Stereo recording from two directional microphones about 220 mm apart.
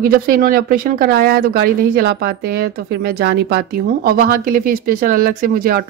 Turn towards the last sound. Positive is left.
turn(degrees=-40)  # may be behind; listen again after turning